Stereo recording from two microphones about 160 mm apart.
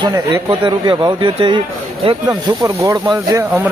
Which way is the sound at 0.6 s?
30° right (ahead or behind).